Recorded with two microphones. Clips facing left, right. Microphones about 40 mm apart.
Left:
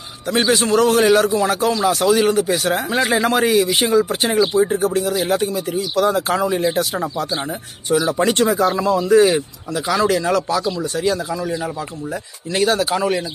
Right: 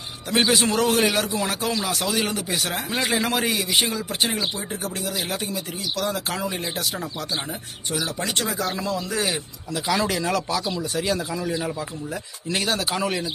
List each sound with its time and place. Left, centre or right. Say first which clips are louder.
0.3 s a man's voice: left 4 dB; centre
7.9 s speech: left 11 dB; centre
8.3 s speech: left 10 dB; left
9.3 s a man's voice: left 8 dB; centre